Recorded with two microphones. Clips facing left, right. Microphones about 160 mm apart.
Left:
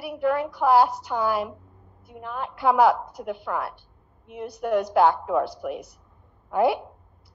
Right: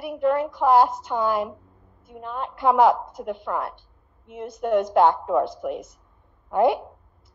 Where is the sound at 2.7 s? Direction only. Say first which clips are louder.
Right 1 dB; 25° right (ahead or behind).